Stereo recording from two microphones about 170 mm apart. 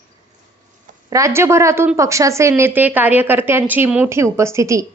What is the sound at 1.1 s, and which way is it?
Speech, 15° right (ahead or behind).